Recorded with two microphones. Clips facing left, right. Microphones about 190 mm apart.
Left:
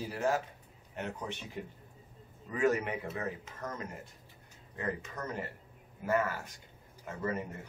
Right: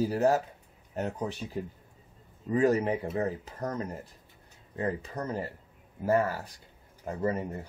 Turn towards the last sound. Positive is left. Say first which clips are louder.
# right 6 dB
turn(degrees=-35)  # may be behind; listen again after turning